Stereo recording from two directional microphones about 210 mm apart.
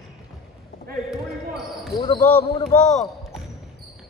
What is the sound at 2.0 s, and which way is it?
Basketball bounce, 30° left (ahead or behind).